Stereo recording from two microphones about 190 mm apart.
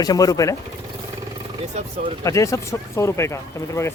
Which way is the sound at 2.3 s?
15° left (ahead or behind).